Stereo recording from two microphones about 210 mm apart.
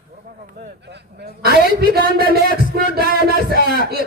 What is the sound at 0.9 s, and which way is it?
A man's voice, 50° right (ahead or behind).